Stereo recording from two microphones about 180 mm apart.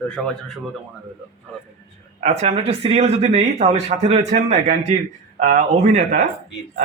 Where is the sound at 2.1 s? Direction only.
40° right (ahead or behind).